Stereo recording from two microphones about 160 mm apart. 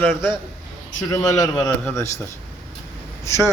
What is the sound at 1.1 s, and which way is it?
Speech, 20° left (ahead or behind).